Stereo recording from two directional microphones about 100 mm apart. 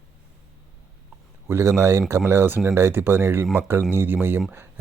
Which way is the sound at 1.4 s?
25° right (ahead or behind).